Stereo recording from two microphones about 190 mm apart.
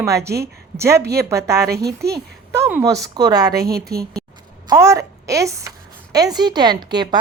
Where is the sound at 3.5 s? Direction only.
55° right (ahead or behind).